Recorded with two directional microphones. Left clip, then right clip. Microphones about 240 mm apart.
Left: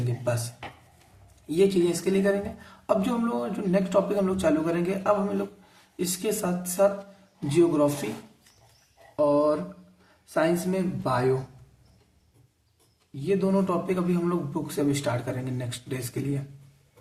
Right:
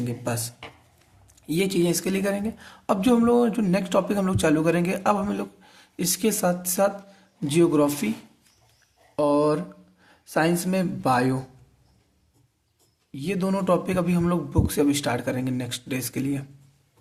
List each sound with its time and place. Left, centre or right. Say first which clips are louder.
0.3 s a woman's voice: left 5 dB; right
9.1 s speech: right 1 dB; right
13.2 s a woman's voice: even; right